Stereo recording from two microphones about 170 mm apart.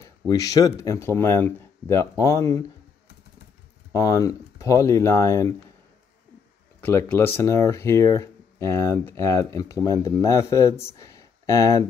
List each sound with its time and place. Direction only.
0.3 s speech: 20° left (ahead or behind)
3.9 s speech: 20° left (ahead or behind)
6.8 s speech: 15° left (ahead or behind)